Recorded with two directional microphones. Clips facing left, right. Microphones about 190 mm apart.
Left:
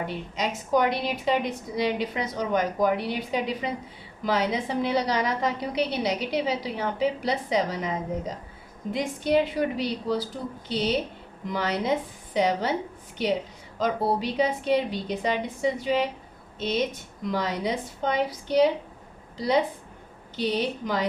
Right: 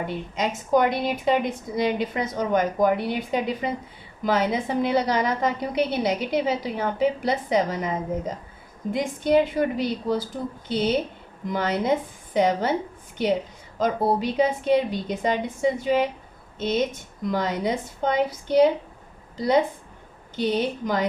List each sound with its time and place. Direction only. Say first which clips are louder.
0.1 s a woman's voice: right 3 dB; 50° right (ahead or behind)
8.9 s a woman's voice: right 3 dB; 50° right (ahead or behind)